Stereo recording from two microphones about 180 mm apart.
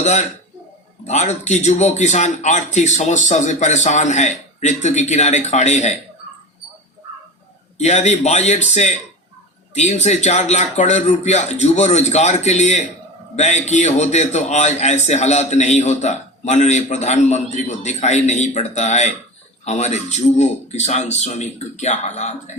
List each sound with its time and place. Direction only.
1.0 s a man's voice: 40° left (ahead or behind)
7.8 s a man's voice: 40° left (ahead or behind)